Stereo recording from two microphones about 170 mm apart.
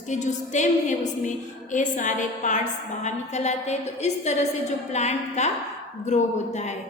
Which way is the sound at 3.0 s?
40° left (ahead or behind).